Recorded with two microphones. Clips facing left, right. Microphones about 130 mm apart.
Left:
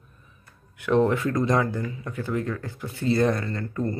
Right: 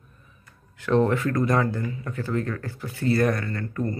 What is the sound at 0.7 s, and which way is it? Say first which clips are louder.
Speech: even; 15° left (ahead or behind).